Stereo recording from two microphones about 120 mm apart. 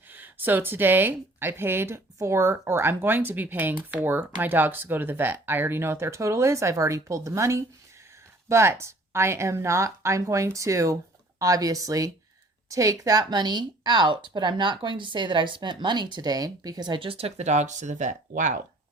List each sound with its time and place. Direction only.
0.1 s a woman's voice: 15° right (ahead or behind); by 18.6 s 90° right